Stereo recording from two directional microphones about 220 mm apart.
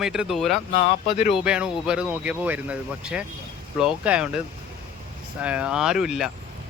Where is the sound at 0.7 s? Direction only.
30° left (ahead or behind).